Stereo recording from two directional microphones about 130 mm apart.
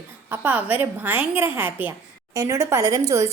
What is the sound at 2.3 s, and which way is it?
A woman's voice, 25° right (ahead or behind).